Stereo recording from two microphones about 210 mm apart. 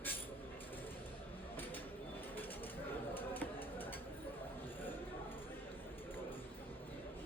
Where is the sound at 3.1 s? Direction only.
10° left (ahead or behind).